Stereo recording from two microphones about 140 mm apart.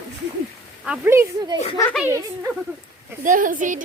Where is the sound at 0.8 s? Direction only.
5° right (ahead or behind).